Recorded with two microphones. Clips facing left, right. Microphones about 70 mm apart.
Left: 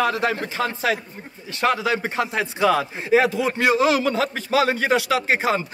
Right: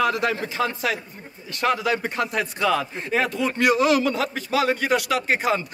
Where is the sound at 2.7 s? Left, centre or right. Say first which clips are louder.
Left 5 dB; centre.